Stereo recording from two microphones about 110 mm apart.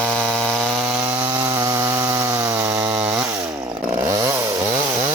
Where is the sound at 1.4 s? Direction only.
25° right (ahead or behind).